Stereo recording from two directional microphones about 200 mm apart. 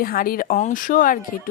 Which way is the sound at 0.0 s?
45° left (ahead or behind).